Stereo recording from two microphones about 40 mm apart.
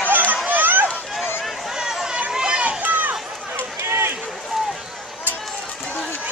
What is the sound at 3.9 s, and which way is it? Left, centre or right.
Run, right.